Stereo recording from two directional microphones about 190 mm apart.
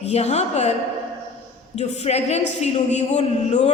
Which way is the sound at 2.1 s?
35° left (ahead or behind).